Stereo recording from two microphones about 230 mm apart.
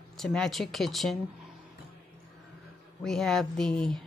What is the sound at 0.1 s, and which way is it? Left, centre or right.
Speech, centre.